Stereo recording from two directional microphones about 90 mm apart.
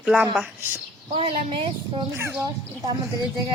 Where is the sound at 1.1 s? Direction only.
75° right (ahead or behind).